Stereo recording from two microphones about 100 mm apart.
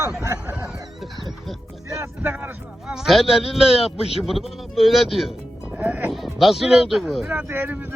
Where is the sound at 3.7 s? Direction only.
80° left.